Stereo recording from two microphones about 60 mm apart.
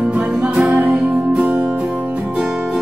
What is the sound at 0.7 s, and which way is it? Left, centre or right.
Music, right.